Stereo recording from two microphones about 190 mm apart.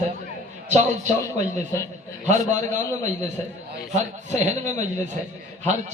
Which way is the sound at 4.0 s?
40° right (ahead or behind).